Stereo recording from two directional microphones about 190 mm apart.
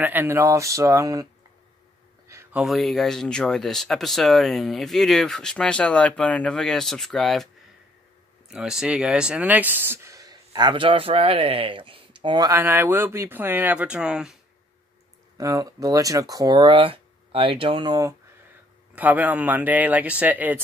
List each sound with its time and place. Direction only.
0.0 s speech: 10° right (ahead or behind)
2.2 s a sound: 15° right (ahead or behind)
2.6 s speech: centre (ahead or behind)
8.5 s speech: 5° right (ahead or behind)
15.3 s speech: 15° right (ahead or behind)
18.9 s speech: 10° right (ahead or behind)